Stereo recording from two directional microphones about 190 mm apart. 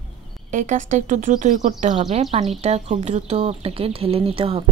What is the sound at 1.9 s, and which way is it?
Speech, 25° right (ahead or behind).